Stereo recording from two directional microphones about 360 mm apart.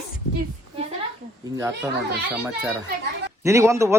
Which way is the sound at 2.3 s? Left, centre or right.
Centre.